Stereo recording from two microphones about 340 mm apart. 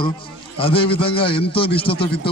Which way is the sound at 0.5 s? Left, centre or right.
Centre.